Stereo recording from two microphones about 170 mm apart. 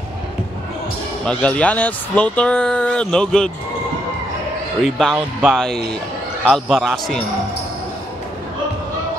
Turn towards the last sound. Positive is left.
turn(degrees=0)  # may be behind; listen again after turning